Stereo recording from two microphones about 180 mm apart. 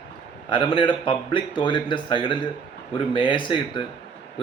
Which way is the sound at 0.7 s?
30° left (ahead or behind).